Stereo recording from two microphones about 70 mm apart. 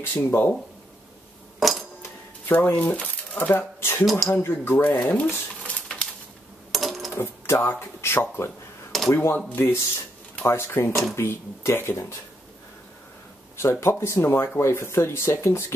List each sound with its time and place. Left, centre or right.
0.0 s speech: left
1.6 s a sound: centre
2.6 s speech: left
4.0 s speech: centre
4.3 s speech: left
4.8 s speech: left
5.6 s a sound: centre
6.7 s a sound: centre
7.4 s speech: left
13.6 s speech: left